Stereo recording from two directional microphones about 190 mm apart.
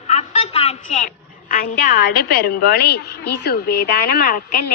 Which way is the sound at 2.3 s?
55° left (ahead or behind).